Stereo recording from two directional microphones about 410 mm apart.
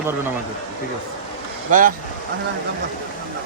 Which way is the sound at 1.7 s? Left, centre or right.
Centre.